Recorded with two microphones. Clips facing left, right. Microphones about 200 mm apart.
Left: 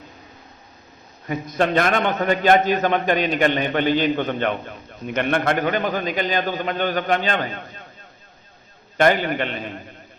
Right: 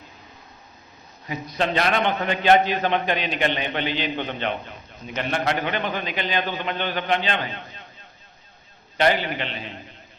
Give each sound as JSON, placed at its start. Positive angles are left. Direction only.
{"t": 1.3, "sound": "a man's voice", "side_deg": 50}
{"t": 9.0, "sound": "a man's voice", "side_deg": 50}